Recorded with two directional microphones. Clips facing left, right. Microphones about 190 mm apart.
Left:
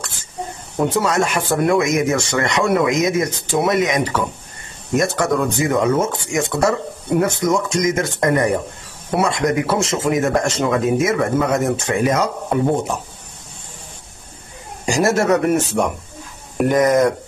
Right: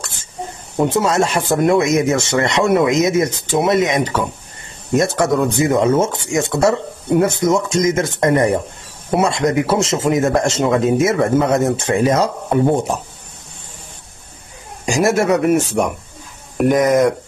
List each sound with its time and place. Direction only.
0.7 s speech: 25° right (ahead or behind)
14.9 s speech: 10° right (ahead or behind)